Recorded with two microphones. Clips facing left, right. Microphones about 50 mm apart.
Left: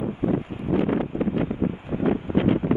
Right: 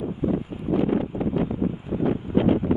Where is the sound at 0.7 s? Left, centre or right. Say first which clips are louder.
Even; left.